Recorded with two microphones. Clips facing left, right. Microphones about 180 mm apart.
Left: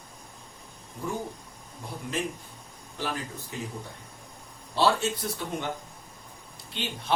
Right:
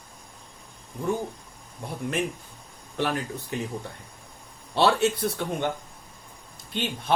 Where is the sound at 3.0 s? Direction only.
65° right (ahead or behind).